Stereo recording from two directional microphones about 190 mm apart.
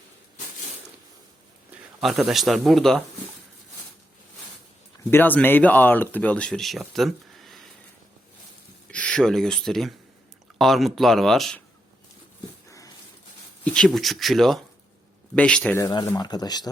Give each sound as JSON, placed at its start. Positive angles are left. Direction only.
{"t": 2.0, "sound": "speech", "side_deg": 0}
{"t": 5.1, "sound": "speech", "side_deg": 10}
{"t": 8.9, "sound": "speech", "side_deg": 5}
{"t": 13.7, "sound": "speech", "side_deg": 5}
{"t": 15.8, "sound": "speech", "side_deg": 20}